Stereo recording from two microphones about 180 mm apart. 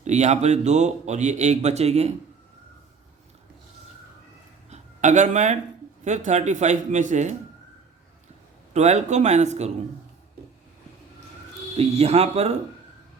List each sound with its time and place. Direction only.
0.0 s speech: 40° right (ahead or behind)
4.7 s a sound: 40° right (ahead or behind)
6.1 s speech: 40° right (ahead or behind)
8.7 s speech: 40° right (ahead or behind)
11.8 s speech: 35° right (ahead or behind)